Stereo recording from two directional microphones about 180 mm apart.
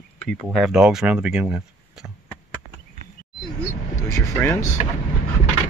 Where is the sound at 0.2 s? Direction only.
Centre (ahead or behind).